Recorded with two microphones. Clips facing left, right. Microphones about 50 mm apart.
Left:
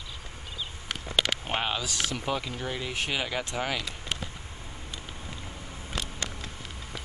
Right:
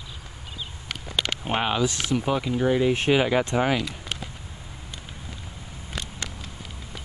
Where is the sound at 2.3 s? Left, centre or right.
Centre.